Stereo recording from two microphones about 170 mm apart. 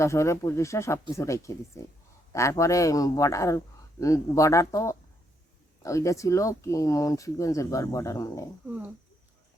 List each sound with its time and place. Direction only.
0.0 s speech: 15° left (ahead or behind)